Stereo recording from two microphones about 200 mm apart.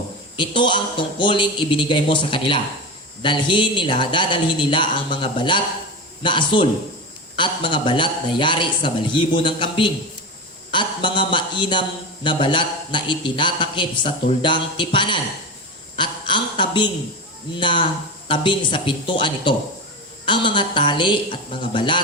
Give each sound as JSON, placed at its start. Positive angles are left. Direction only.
{"t": 0.3, "sound": "speech", "side_deg": 25}